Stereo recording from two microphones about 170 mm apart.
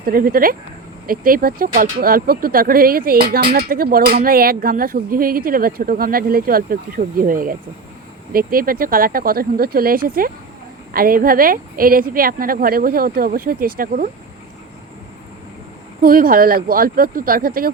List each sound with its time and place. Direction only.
0.0 s speech: 60° right (ahead or behind)
16.0 s speech: 55° right (ahead or behind)